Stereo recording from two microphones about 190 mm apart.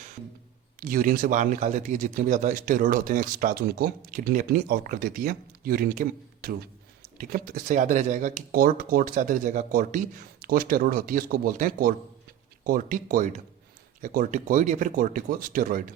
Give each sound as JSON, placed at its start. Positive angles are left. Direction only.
{"t": 0.8, "sound": "speech", "side_deg": -45}